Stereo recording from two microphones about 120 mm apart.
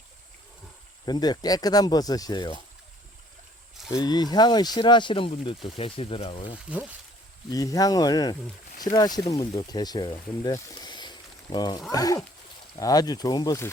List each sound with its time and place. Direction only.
1.0 s speech: 35° left (ahead or behind)
3.8 s speech: 35° left (ahead or behind); by 6.6 s 50° left (ahead or behind)
6.7 s speech: 10° right (ahead or behind)
7.5 s speech: 30° left (ahead or behind)